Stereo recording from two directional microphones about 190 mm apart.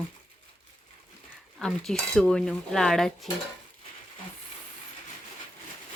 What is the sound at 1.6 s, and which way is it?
Speech, 5° left (ahead or behind).